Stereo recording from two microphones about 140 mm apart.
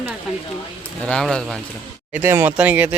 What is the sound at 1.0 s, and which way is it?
Speech, 5° left (ahead or behind).